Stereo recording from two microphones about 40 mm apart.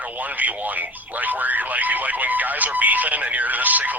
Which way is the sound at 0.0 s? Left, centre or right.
Right.